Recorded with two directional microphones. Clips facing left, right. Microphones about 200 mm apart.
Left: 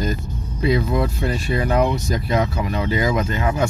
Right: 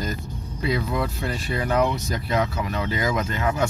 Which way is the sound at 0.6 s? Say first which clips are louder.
Left 5 dB; 20° left (ahead or behind).